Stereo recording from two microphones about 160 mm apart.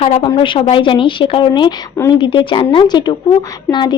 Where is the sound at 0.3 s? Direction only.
30° left (ahead or behind).